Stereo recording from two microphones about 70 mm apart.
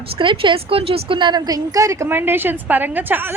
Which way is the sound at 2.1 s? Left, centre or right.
Right.